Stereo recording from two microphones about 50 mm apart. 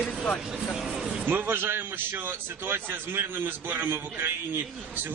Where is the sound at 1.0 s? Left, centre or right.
Centre.